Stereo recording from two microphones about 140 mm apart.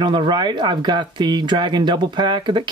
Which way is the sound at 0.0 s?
30° right (ahead or behind).